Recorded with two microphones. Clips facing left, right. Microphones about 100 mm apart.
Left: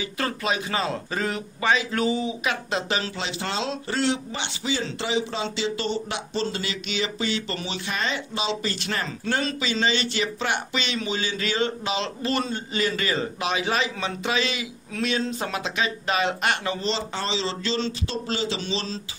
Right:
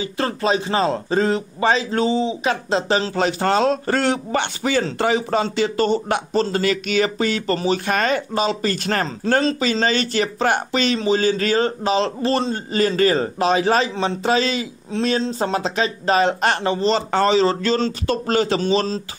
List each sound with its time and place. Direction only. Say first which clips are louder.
0.0 s a man's voice: right 6 dB; 30° right (ahead or behind)
3.2 s a man's voice: right 11 dB; 45° right (ahead or behind)
17.1 s a man's voice: right 12 dB; 50° right (ahead or behind)